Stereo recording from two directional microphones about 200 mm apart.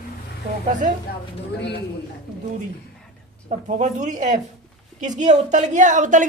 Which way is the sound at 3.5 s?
35° right (ahead or behind).